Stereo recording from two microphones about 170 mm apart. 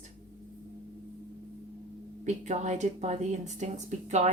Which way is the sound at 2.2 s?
45° right (ahead or behind).